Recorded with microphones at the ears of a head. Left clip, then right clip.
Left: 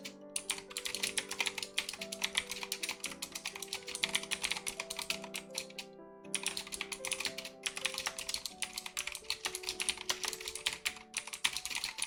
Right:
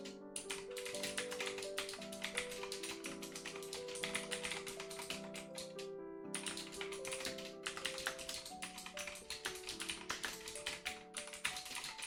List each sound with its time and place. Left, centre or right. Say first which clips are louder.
0.4 s music: left 4 dB; left
3.4 s typing: left 3 dB; left
7.0 s music: left 5 dB; left